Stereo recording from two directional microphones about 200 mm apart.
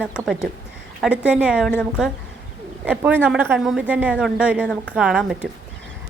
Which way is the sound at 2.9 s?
10° right (ahead or behind).